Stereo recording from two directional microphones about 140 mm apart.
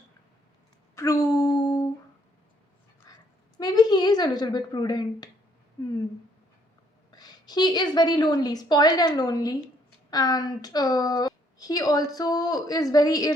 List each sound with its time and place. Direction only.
0.9 s a sound: 25° left (ahead or behind)
3.1 s dog: 25° left (ahead or behind)
3.6 s speech: 30° left (ahead or behind)
7.1 s a woman's voice: 30° left (ahead or behind)